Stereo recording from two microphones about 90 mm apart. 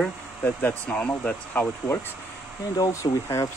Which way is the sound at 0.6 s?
15° left (ahead or behind).